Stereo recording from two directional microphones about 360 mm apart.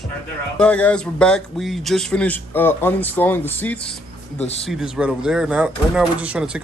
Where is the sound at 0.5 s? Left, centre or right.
Centre.